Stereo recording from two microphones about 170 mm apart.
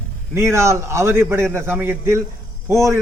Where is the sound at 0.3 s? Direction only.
15° right (ahead or behind).